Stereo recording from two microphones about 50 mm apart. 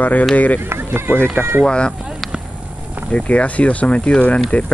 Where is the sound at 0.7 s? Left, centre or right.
Right.